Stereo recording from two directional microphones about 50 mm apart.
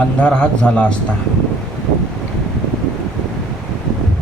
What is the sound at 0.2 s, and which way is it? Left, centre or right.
Speech, left.